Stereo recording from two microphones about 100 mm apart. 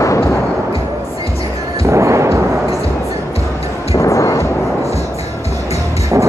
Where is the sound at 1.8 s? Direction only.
30° right (ahead or behind).